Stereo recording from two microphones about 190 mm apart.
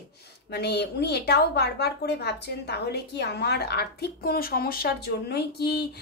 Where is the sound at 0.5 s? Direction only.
60° left (ahead or behind).